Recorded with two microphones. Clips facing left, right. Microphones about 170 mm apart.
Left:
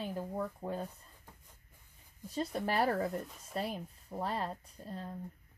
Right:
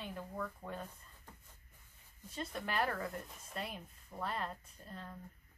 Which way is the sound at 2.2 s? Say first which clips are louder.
Left 7 dB; 35° left (ahead or behind).